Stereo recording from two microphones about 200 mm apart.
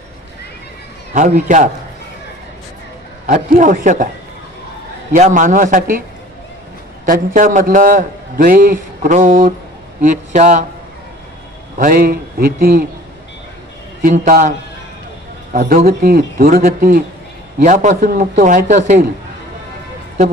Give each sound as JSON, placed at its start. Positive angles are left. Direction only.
{"t": 1.1, "sound": "a man's voice", "side_deg": -40}
{"t": 3.3, "sound": "a man's voice", "side_deg": -40}
{"t": 5.1, "sound": "a man's voice", "side_deg": -40}
{"t": 7.1, "sound": "a man's voice", "side_deg": -40}
{"t": 11.8, "sound": "a man's voice", "side_deg": -45}
{"t": 14.0, "sound": "a man's voice", "side_deg": -40}
{"t": 15.5, "sound": "a man's voice", "side_deg": -40}